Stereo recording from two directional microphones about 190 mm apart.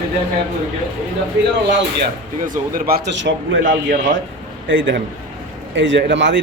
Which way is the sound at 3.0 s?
70° right (ahead or behind).